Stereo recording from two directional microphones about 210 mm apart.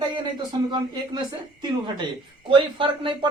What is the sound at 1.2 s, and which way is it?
Speech, 20° right (ahead or behind).